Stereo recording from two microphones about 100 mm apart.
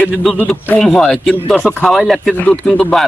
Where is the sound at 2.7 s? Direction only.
5° left (ahead or behind).